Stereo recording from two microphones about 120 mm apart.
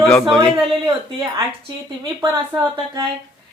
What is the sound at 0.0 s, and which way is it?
Speech, 5° left (ahead or behind).